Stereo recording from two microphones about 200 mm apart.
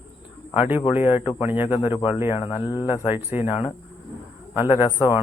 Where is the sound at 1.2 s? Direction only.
25° left (ahead or behind).